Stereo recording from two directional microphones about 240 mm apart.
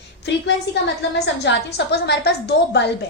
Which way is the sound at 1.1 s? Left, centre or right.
Left.